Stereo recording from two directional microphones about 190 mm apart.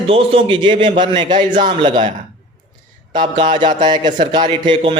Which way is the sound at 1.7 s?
25° right (ahead or behind).